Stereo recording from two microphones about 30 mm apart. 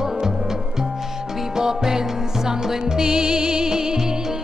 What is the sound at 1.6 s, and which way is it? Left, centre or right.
Music, right.